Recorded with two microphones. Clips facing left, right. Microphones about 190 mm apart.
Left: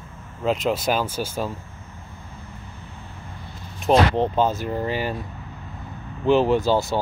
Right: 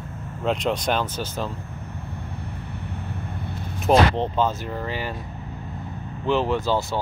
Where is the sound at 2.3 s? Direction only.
65° right (ahead or behind).